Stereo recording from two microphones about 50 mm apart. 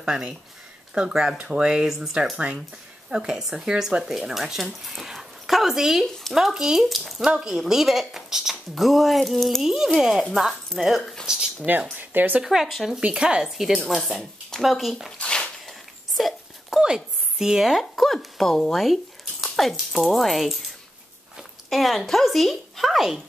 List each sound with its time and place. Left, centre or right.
0.0 s speech: centre
1.1 s a woman's voice: centre
1.5 s a woman's voice: centre
4.8 s zipper: centre
6.3 s a woman's voice: centre
7.2 s a woman's voice: centre
9.6 s a woman's voice: centre
11.7 s speech: right
12.4 s a woman's voice: centre
13.0 s a woman's voice: centre
13.8 s speech: centre
15.1 s a sound: left
16.2 s wail: centre
16.8 s speech: centre